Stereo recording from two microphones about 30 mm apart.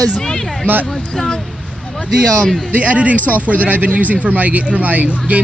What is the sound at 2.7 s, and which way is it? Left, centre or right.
Speech, right.